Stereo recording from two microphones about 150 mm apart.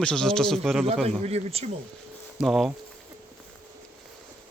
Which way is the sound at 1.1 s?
45° right (ahead or behind).